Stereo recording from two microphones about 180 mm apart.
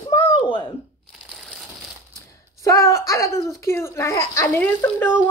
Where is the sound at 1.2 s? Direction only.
Centre (ahead or behind).